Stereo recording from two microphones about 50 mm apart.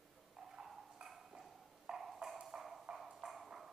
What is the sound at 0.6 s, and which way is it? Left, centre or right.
Ping, centre.